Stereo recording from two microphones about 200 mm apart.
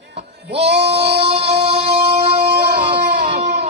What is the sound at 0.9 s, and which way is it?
Music, 30° right (ahead or behind).